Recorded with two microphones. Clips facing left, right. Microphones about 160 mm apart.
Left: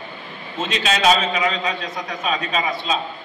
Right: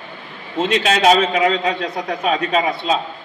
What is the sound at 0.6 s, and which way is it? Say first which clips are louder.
A man's voice: right 4 dB; 60° right (ahead or behind).